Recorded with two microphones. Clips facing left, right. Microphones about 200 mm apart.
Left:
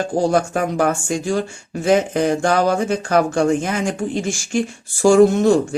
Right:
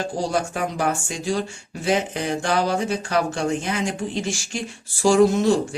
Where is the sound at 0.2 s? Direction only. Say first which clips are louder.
Left 8 dB; 50° left (ahead or behind).